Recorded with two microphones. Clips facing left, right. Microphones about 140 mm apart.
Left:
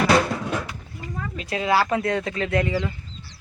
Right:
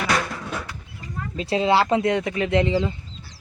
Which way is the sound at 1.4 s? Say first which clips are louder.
Right 3 dB; 30° right (ahead or behind).